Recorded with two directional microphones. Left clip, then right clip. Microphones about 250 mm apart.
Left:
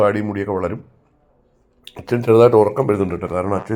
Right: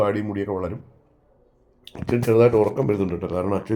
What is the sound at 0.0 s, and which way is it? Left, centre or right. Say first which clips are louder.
Speech: left 5 dB; centre.